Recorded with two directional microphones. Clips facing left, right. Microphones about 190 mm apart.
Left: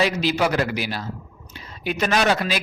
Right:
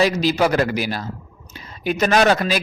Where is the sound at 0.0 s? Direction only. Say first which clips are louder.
Right 3 dB; 40° right (ahead or behind).